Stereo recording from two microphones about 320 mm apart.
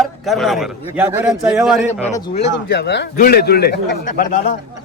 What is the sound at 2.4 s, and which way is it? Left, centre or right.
A man's voice, left.